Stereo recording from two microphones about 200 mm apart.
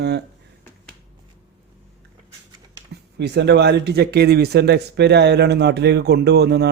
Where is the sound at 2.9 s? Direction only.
55° right (ahead or behind).